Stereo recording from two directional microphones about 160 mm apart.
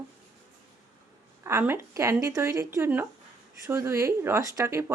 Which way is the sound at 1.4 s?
15° right (ahead or behind).